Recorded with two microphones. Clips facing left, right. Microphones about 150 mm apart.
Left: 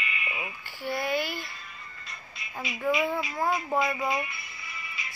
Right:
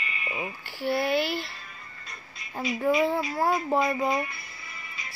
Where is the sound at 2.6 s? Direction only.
40° right (ahead or behind).